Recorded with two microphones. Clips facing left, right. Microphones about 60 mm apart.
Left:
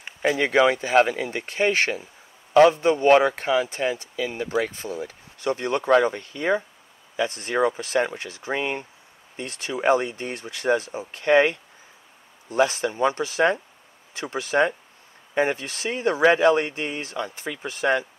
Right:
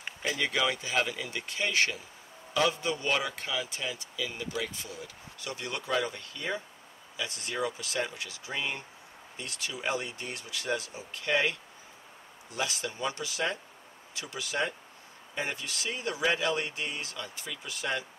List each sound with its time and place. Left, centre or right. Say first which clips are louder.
0.4 s a man's voice: left 11 dB; left